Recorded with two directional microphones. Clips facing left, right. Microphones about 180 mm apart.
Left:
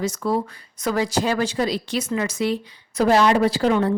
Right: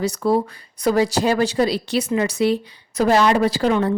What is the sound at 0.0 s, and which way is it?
Speech, 30° right (ahead or behind).